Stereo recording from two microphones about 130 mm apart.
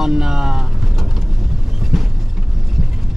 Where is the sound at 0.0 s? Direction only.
5° right (ahead or behind).